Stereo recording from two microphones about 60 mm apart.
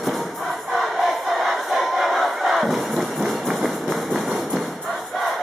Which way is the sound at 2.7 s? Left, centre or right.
Centre.